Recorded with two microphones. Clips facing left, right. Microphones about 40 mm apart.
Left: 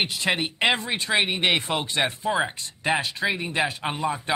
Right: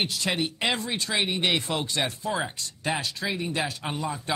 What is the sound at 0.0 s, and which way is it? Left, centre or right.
Speech, left.